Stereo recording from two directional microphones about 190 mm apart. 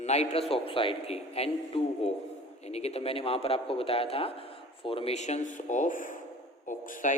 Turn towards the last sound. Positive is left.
turn(degrees=40)  # may be behind; listen again after turning